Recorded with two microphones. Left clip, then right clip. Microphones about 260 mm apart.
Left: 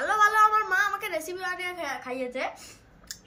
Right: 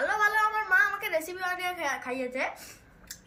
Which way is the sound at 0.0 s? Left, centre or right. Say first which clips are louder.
Left 4 dB; centre.